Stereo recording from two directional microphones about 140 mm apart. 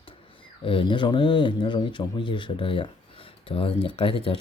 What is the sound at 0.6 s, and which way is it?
Speech, 40° left (ahead or behind).